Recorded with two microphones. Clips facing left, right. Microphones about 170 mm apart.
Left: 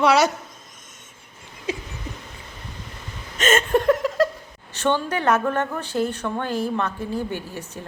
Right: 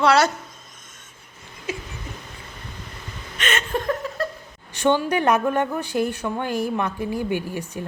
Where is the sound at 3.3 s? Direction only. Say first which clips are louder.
Left 6 dB; 45° left (ahead or behind).